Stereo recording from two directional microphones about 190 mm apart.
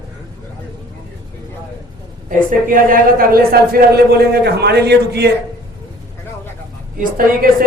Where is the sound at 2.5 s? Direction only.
45° right (ahead or behind).